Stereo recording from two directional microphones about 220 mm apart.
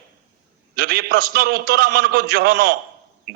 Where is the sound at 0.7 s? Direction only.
45° right (ahead or behind).